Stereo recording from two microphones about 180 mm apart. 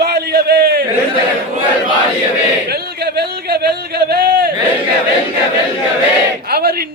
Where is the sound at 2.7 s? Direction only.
65° right (ahead or behind).